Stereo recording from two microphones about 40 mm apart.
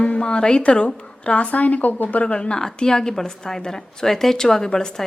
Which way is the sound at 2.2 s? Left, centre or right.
Left.